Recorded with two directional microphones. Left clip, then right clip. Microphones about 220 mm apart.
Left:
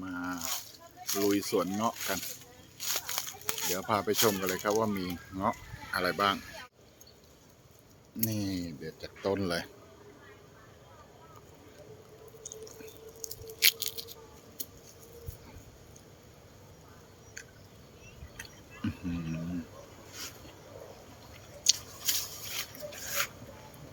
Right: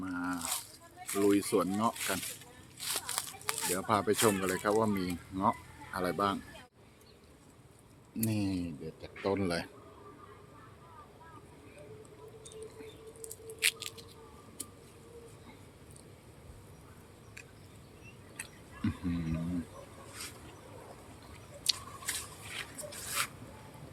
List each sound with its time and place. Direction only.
0.0 s squish: centre (ahead or behind)
1.0 s speech: 5° left (ahead or behind)
2.0 s speech: 15° right (ahead or behind)
2.7 s speech: centre (ahead or behind)
8.3 s speech: 5° right (ahead or behind)
13.2 s a sound: 15° left (ahead or behind)
18.3 s a sound: 5° right (ahead or behind)
21.6 s a sound: 5° left (ahead or behind)
22.9 s rub: 5° right (ahead or behind)